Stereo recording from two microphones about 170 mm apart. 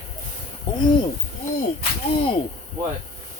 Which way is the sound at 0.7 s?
30° left (ahead or behind).